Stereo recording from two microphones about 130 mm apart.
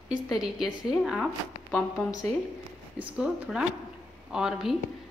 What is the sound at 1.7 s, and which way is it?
Speech, 5° left (ahead or behind).